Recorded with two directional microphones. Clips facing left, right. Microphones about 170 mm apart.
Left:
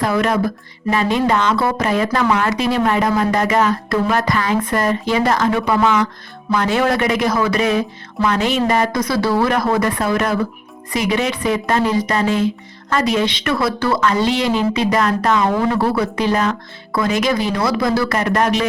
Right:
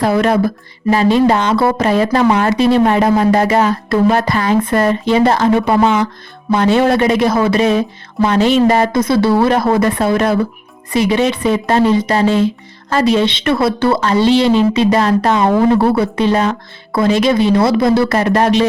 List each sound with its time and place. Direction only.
0.0 s speech: 30° right (ahead or behind)